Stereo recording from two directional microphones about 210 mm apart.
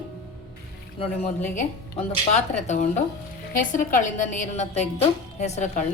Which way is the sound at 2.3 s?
35° left (ahead or behind).